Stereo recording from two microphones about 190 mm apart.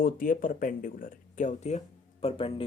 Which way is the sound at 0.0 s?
45° left (ahead or behind).